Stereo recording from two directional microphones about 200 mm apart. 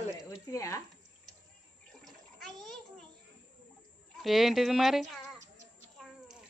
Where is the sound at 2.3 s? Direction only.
Centre (ahead or behind).